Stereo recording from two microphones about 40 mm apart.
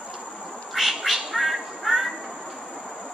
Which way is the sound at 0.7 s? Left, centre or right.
Centre.